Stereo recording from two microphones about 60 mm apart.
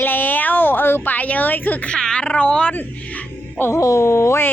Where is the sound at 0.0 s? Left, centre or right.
Left.